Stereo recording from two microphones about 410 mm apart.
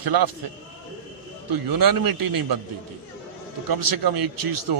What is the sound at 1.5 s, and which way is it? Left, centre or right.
A man's voice, right.